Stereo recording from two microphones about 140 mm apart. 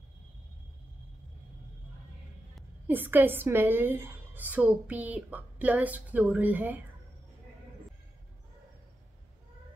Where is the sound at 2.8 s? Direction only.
15° right (ahead or behind).